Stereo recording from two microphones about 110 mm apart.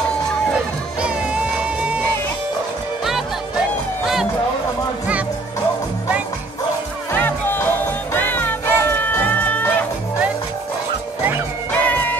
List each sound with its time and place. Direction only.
1.0 s music: 10° right (ahead or behind)
7.1 s music: 20° left (ahead or behind)
11.7 s music: 15° left (ahead or behind)